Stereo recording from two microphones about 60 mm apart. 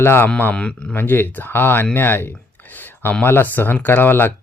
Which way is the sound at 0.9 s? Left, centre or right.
Left.